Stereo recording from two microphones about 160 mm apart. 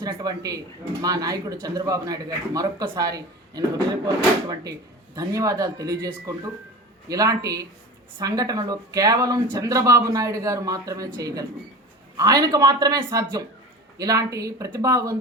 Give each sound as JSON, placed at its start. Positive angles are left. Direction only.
{"t": 0.0, "sound": "speech", "side_deg": -25}